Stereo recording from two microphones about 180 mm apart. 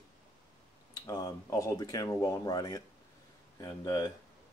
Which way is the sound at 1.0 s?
20° left (ahead or behind).